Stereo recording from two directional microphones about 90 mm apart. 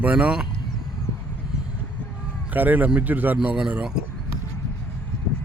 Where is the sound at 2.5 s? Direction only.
20° right (ahead or behind).